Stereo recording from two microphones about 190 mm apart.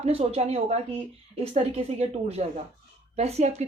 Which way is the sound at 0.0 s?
30° right (ahead or behind).